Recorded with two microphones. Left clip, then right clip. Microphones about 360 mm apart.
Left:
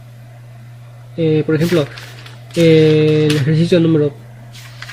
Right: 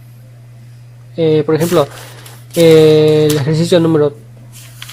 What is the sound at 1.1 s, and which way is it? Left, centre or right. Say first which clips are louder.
Speech: right 4 dB; centre.